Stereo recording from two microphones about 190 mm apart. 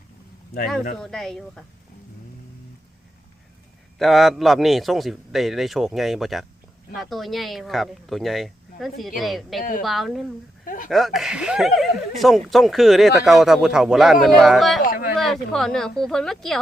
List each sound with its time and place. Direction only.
0.9 s speech: 5° left (ahead or behind)
3.9 s speech: centre (ahead or behind)
14.8 s a sound: 50° left (ahead or behind)
15.2 s speech: centre (ahead or behind)